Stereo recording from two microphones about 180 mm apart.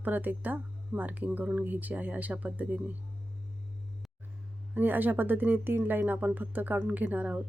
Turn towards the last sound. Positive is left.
turn(degrees=-10)  # may be behind; listen again after turning